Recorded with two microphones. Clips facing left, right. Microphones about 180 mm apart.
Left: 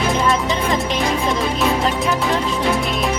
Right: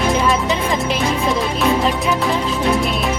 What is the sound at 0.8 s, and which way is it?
Speech, centre (ahead or behind).